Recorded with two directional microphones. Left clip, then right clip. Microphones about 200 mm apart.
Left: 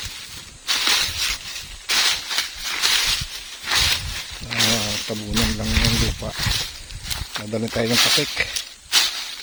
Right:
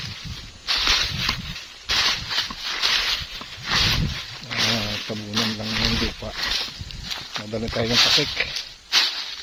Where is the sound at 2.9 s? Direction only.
45° left (ahead or behind).